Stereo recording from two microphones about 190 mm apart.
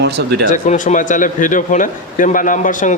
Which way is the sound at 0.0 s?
60° right (ahead or behind).